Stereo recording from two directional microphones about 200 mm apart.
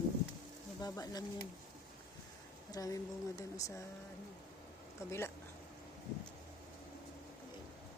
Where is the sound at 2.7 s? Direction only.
15° left (ahead or behind).